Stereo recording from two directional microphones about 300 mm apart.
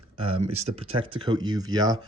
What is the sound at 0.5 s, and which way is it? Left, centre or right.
Speech, right.